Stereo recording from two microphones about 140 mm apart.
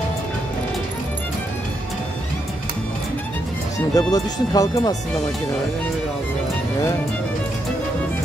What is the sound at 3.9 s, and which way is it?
Speech, 25° left (ahead or behind).